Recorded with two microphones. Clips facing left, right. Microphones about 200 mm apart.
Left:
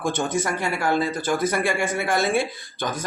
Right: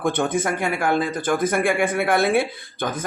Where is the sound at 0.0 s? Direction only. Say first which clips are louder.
Right 3 dB; 55° right (ahead or behind).